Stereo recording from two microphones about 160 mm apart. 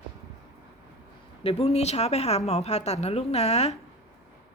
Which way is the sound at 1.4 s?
40° left (ahead or behind).